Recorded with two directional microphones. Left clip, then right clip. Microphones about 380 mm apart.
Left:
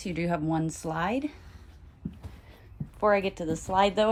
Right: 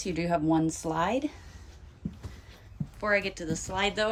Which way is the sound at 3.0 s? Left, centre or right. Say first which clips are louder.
Left 3 dB; centre.